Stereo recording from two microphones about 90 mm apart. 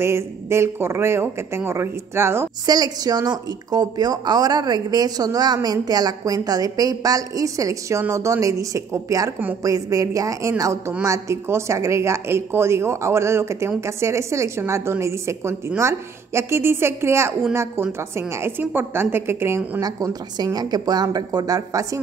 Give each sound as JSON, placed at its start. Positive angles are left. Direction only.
{"t": 0.0, "sound": "a woman's voice", "side_deg": -30}
{"t": 2.6, "sound": "a woman's voice", "side_deg": -45}
{"t": 19.8, "sound": "a woman's voice", "side_deg": -45}